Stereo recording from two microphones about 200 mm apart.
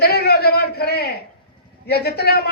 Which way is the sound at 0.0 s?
50° left (ahead or behind).